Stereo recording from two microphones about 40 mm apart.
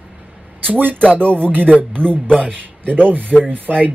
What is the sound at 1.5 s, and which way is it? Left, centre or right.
Speech, right.